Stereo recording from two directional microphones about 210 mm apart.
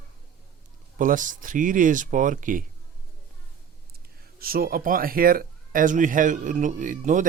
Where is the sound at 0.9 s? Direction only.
40° right (ahead or behind).